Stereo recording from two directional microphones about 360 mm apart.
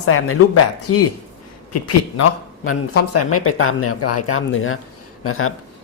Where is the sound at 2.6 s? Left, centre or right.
Left.